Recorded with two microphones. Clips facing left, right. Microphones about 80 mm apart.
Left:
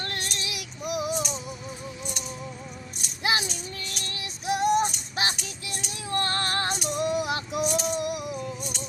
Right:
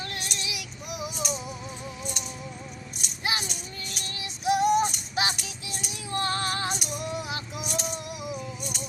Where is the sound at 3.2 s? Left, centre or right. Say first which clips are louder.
Left 4 dB; left.